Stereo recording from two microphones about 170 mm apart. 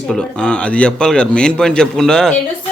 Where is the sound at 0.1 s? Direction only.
5° left (ahead or behind).